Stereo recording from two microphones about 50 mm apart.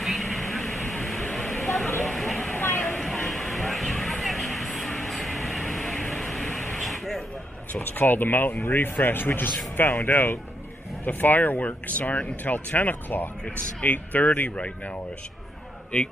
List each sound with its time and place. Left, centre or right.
0.0 s vehicle: centre
2.0 s a sound: centre
7.8 s speech: left
13.6 s speech: left